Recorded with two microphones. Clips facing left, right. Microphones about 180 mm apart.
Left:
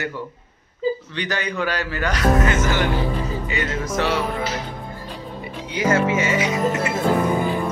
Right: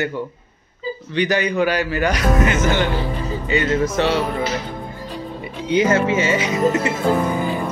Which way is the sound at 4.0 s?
25° right (ahead or behind).